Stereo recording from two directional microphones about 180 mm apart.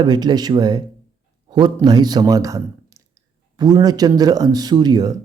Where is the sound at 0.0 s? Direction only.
25° right (ahead or behind).